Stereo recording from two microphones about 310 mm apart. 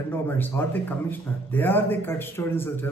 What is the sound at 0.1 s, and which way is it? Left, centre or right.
A man's voice, centre.